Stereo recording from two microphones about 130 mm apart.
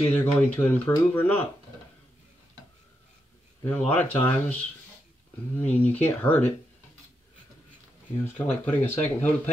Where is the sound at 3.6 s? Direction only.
15° left (ahead or behind).